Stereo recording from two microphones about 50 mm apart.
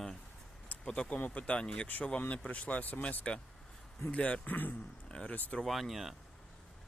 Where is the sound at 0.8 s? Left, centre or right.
Centre.